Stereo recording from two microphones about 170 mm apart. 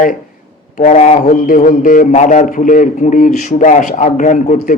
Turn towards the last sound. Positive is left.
turn(degrees=45)  # may be behind; listen again after turning